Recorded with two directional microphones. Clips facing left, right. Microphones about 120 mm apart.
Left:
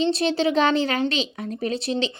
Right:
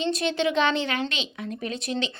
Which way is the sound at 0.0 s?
30° left (ahead or behind).